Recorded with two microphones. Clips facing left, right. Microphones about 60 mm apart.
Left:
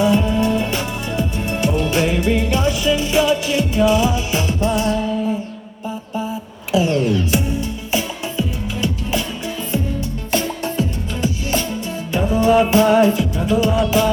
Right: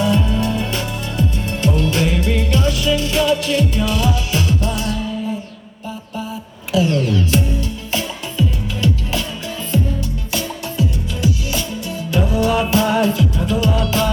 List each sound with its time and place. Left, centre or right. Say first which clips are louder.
0.0 s music: left 2 dB; left
6.7 s music: left 1 dB; left
10.3 s music: left 4 dB; left; by 14.1 s centre